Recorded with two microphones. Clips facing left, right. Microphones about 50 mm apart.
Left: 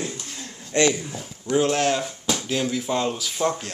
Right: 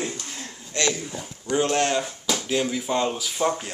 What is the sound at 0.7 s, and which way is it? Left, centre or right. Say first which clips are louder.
Speech: left 5 dB; left.